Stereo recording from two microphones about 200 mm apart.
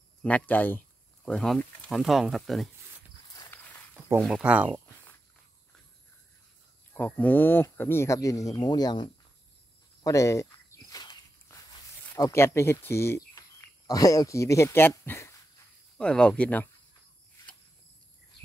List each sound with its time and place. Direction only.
0.2 s speech: 10° left (ahead or behind)
3.3 s walk: 10° left (ahead or behind)
4.2 s speech: 5° right (ahead or behind)
6.9 s speech: 10° left (ahead or behind)
10.0 s walk: 15° left (ahead or behind)
12.2 s speech: 15° left (ahead or behind)